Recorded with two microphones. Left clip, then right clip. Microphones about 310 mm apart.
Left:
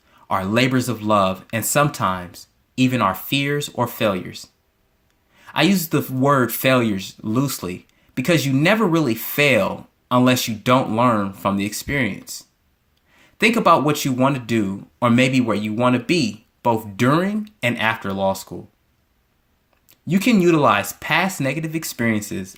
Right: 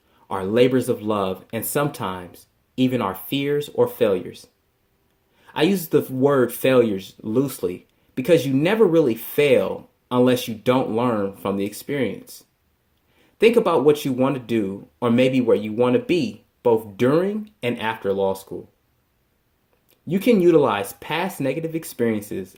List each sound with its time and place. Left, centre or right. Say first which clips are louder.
0.3 s speech: right 1 dB; left
13.4 s speech: left 1 dB; left
20.1 s speech: right 1 dB; left